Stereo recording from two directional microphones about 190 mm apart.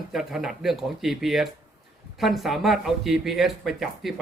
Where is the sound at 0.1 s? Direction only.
Centre (ahead or behind).